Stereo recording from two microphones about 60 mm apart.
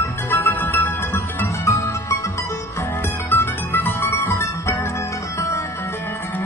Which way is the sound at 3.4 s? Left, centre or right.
Left.